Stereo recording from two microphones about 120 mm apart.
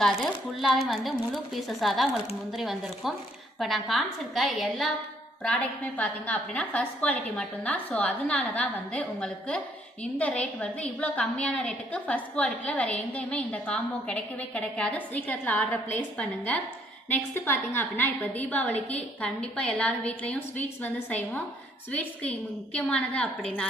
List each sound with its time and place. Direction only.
0.0 s a woman's voice: centre (ahead or behind)
5.4 s a woman's voice: 10° left (ahead or behind)
10.6 s a woman's voice: 10° left (ahead or behind)